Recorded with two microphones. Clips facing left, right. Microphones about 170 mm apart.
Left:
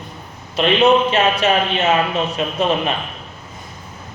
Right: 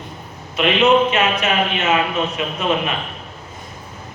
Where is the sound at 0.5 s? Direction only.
35° left (ahead or behind).